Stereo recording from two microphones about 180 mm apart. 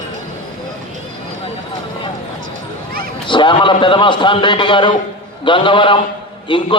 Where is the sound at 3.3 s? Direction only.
25° left (ahead or behind).